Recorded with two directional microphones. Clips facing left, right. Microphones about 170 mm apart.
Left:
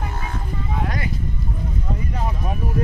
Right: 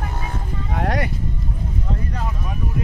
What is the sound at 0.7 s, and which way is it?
Music, 65° right (ahead or behind).